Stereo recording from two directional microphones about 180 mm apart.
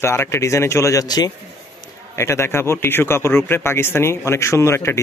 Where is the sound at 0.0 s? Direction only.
15° left (ahead or behind).